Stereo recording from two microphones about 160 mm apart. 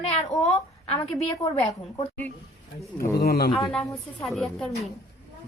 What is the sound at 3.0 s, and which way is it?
Speech, 75° left (ahead or behind).